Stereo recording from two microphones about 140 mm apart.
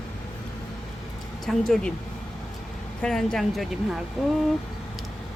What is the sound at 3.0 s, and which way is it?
Speech, 5° left (ahead or behind).